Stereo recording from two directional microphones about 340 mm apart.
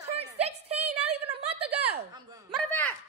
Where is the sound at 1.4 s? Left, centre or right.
Right.